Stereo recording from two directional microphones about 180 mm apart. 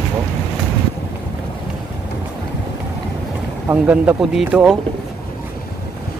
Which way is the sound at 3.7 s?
10° right (ahead or behind).